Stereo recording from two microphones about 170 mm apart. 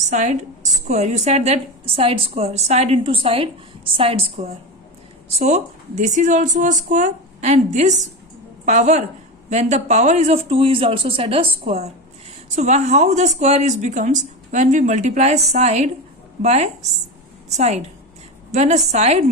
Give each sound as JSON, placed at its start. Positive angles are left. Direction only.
{"t": 0.0, "sound": "a woman's voice", "side_deg": -45}